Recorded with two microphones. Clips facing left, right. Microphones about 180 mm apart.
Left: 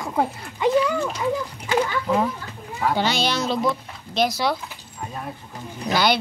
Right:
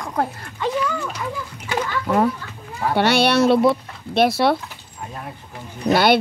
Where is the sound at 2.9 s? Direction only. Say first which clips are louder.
Right 10 dB; 65° right (ahead or behind).